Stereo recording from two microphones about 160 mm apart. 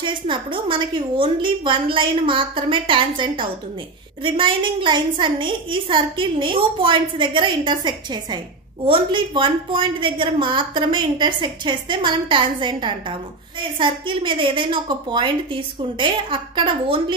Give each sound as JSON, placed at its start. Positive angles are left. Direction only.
{"t": 0.0, "sound": "a woman's voice", "side_deg": -30}